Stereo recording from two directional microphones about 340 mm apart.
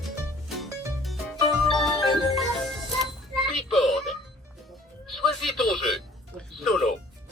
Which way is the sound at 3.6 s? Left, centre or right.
Centre.